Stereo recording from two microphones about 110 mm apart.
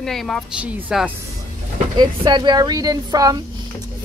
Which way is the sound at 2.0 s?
45° right (ahead or behind).